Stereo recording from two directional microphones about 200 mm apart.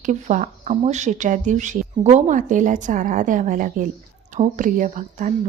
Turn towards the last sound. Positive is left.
turn(degrees=-40)  # may be behind; listen again after turning